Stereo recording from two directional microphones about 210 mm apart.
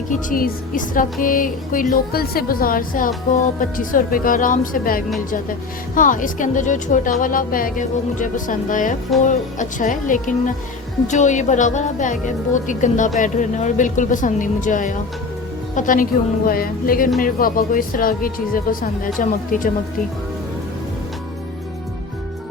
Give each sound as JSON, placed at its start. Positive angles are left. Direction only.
{"t": 0.1, "sound": "speech", "side_deg": 40}